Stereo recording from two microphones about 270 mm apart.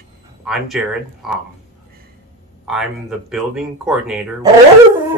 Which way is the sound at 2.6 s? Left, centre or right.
Centre.